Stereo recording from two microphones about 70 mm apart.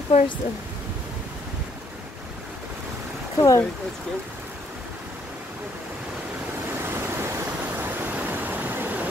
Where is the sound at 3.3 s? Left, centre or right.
Left.